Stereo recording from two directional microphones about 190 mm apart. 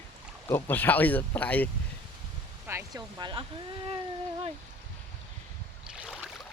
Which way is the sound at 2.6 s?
15° right (ahead or behind).